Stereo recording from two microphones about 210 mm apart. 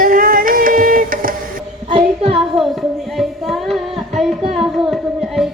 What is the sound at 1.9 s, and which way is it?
Child singing, 30° right (ahead or behind).